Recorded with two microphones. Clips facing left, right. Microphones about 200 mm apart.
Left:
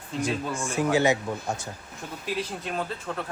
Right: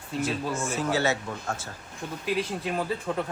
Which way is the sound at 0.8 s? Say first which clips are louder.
Left 6 dB; 15° left (ahead or behind).